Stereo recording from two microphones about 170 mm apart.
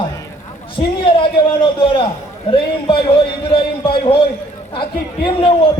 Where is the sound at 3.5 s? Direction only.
30° left (ahead or behind).